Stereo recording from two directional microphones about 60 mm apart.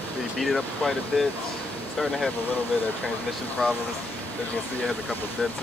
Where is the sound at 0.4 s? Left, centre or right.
Centre.